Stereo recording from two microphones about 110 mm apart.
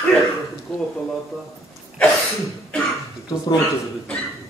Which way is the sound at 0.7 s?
10° left (ahead or behind).